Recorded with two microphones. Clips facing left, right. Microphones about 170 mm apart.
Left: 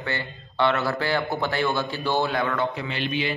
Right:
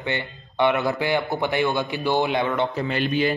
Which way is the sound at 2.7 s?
45° right (ahead or behind).